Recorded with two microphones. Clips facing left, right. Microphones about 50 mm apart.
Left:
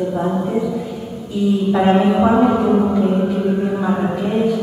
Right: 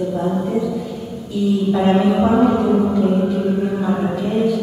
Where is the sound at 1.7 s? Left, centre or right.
Centre.